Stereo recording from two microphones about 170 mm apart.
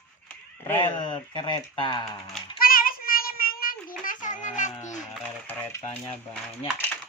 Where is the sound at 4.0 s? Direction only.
50° left (ahead or behind).